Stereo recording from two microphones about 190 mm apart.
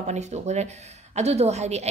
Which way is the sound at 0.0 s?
35° right (ahead or behind).